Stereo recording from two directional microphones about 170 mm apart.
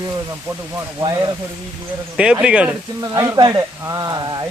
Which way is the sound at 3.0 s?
20° right (ahead or behind).